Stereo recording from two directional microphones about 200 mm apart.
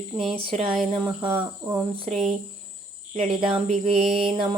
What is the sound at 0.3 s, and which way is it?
Speech, 30° right (ahead or behind).